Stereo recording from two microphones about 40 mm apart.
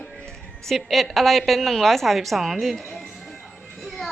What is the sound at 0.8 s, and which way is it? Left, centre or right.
A woman's voice, centre.